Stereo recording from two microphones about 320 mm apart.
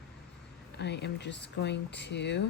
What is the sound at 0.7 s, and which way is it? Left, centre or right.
Speech, left.